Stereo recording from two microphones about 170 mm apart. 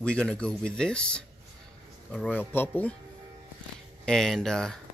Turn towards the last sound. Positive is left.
turn(degrees=5)  # may be behind; listen again after turning